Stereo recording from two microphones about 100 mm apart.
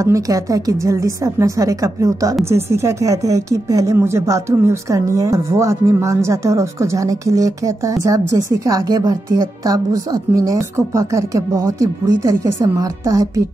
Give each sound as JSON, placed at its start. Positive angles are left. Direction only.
{"t": 0.0, "sound": "speech", "side_deg": -35}